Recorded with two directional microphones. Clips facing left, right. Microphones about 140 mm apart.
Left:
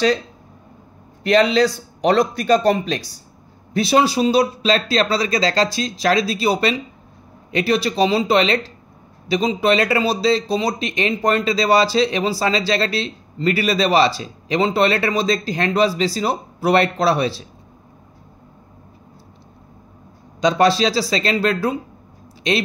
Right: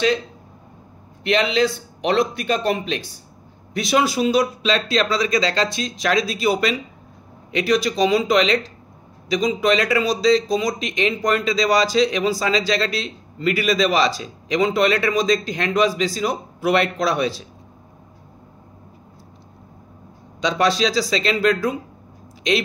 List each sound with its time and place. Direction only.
1.2 s speech: 40° left (ahead or behind)
20.3 s speech: 35° left (ahead or behind)